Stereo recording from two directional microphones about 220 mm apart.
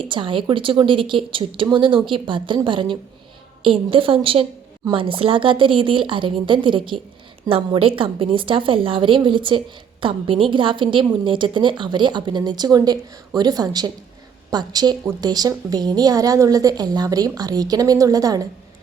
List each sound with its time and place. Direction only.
0.0 s a woman's voice: 25° right (ahead or behind)